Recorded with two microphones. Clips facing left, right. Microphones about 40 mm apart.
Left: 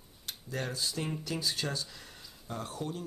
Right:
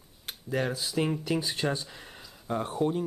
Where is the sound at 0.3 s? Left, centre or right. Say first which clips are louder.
Right 7 dB; right.